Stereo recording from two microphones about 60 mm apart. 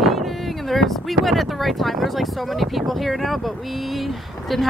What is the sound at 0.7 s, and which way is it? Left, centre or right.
Speech, centre.